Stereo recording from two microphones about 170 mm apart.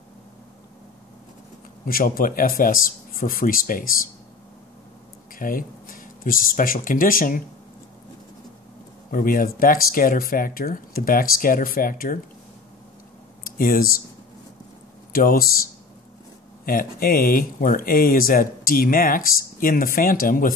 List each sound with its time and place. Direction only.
1.9 s speech: 55° left (ahead or behind)
5.3 s speech: 55° left (ahead or behind)
9.1 s speech: 55° left (ahead or behind)
13.4 s speech: 55° left (ahead or behind)
15.1 s speech: 60° left (ahead or behind)
16.6 s speech: 55° left (ahead or behind)